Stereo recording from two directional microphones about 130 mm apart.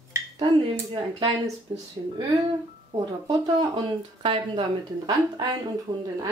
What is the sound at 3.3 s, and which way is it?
A woman's voice, 30° right (ahead or behind).